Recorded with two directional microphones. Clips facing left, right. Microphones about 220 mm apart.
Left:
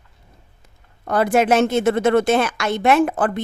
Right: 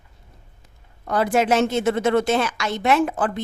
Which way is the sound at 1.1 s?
55° left (ahead or behind).